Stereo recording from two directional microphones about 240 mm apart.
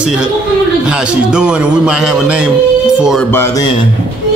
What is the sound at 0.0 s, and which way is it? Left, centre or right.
A man's voice, centre.